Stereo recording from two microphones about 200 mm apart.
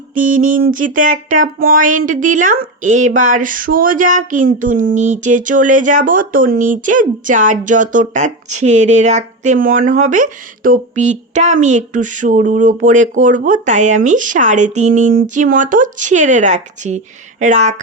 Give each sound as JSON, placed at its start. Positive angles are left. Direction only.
{"t": 0.1, "sound": "speech", "side_deg": -40}